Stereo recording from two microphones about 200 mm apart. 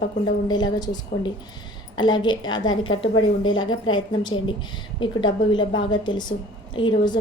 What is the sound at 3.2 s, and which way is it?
Speech, 90° left.